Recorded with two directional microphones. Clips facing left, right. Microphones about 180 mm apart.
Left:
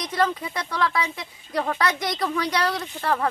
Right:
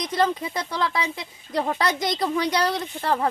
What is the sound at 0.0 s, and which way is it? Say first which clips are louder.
Speech: right 1 dB; 20° right (ahead or behind).